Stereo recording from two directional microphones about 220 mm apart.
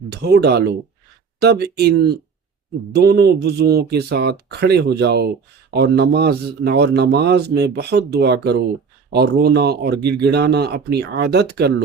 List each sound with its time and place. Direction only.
0.1 s a man's voice: 50° right (ahead or behind)